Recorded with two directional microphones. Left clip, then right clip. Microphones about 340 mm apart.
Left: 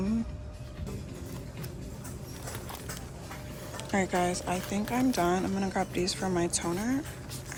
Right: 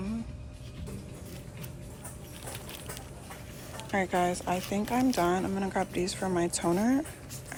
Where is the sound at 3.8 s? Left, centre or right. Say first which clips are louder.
Right 1 dB; centre.